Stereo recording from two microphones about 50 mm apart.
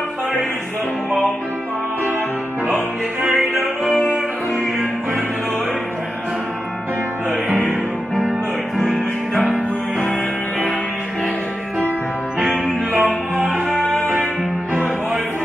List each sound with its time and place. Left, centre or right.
2.6 s music: right
8.7 s music: centre
12.9 s music: right
13.8 s music: left
14.7 s music: right